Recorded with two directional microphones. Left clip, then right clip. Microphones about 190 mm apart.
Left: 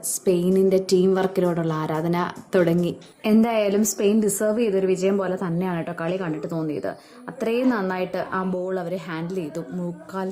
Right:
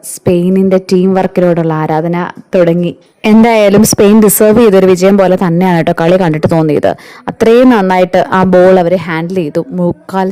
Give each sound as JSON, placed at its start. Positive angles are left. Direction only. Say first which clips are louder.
{"t": 0.3, "sound": "speech", "louder": "right 10 dB", "side_deg": -40}
{"t": 3.2, "sound": "speech", "louder": "right 14 dB", "side_deg": -50}